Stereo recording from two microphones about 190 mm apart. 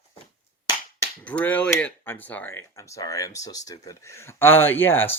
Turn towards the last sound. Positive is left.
turn(degrees=10)  # may be behind; listen again after turning